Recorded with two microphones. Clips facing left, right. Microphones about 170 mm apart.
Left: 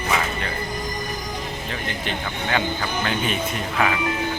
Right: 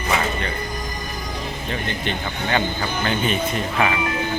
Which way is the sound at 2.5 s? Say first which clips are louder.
Right 1 dB; centre (ahead or behind).